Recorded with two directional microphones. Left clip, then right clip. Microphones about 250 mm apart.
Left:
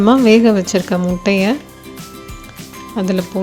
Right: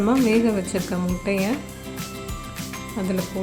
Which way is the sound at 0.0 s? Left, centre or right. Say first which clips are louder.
Left 9 dB; left.